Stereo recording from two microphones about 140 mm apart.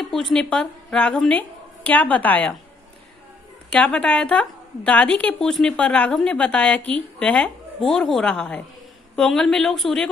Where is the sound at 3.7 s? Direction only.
10° left (ahead or behind).